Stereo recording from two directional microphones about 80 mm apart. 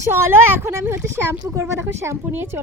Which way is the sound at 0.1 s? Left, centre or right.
Right.